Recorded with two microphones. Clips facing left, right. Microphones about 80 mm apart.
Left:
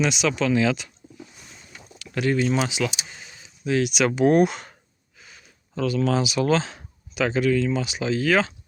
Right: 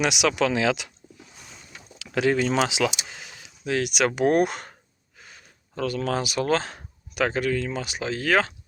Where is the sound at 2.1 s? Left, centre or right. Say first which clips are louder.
Even; right.